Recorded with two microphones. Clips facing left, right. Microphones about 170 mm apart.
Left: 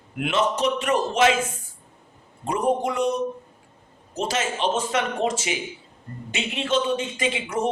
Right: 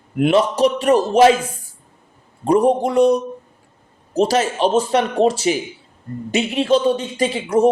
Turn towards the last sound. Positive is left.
turn(degrees=-35)  # may be behind; listen again after turning